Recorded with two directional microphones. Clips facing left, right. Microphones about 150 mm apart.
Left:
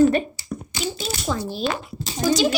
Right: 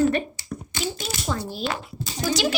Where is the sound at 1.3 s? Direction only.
20° left (ahead or behind).